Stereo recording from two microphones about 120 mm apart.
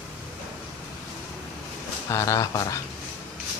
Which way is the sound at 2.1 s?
25° left (ahead or behind).